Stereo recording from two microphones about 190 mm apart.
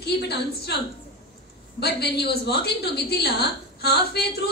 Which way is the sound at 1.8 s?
60° left (ahead or behind).